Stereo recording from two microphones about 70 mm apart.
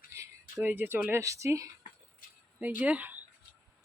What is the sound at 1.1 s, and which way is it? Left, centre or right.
Speech, right.